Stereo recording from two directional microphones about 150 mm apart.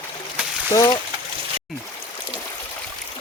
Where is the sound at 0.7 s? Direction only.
20° left (ahead or behind).